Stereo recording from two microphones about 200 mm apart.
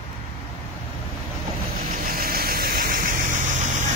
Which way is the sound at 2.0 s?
45° right (ahead or behind).